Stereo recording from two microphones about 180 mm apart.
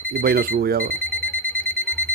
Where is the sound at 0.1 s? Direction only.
55° right (ahead or behind).